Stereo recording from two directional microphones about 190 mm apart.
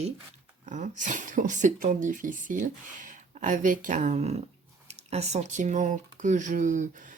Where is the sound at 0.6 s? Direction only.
40° right (ahead or behind).